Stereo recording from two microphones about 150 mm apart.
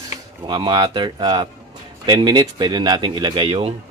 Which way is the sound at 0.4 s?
30° right (ahead or behind).